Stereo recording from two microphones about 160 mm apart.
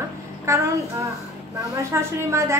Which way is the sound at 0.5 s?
20° right (ahead or behind).